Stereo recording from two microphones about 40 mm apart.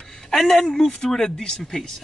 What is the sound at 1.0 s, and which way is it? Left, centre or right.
Speech, centre.